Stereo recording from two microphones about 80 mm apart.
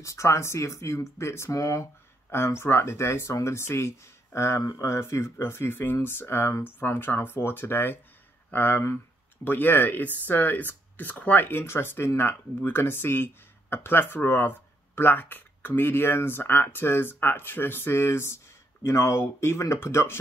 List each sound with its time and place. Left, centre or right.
0.0 s speech: left